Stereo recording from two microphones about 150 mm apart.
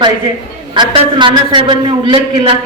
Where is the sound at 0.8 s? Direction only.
30° right (ahead or behind).